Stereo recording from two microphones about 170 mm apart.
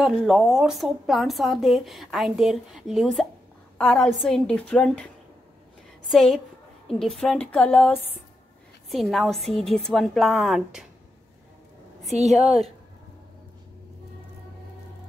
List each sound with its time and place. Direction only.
0.0 s a woman's voice: centre (ahead or behind)
6.0 s a woman's voice: centre (ahead or behind)
12.2 s a woman's voice: 40° right (ahead or behind)